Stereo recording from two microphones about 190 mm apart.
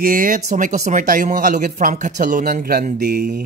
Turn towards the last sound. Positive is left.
turn(degrees=-55)  # may be behind; listen again after turning